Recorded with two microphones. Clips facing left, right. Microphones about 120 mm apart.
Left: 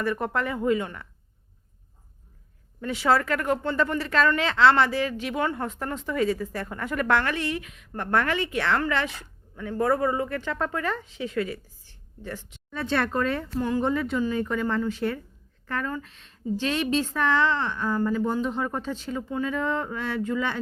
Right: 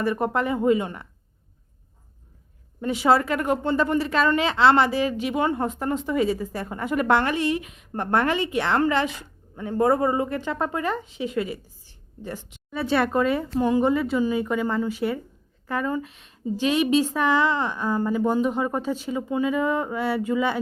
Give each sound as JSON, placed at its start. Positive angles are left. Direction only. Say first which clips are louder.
{"t": 0.0, "sound": "speech", "louder": "right 3 dB", "side_deg": -20}
{"t": 2.8, "sound": "a woman's voice", "louder": "right 3 dB", "side_deg": -15}